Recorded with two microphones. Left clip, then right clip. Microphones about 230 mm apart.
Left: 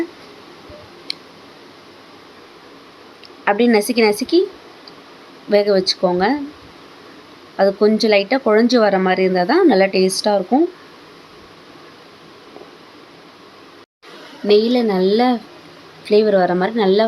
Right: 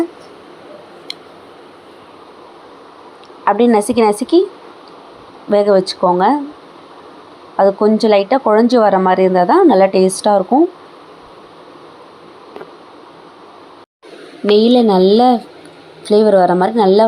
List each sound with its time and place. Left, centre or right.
3.4 s speech: centre
5.5 s speech: centre
7.5 s speech: centre
14.4 s speech: centre